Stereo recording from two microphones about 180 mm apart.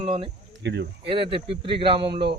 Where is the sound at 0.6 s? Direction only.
75° right (ahead or behind).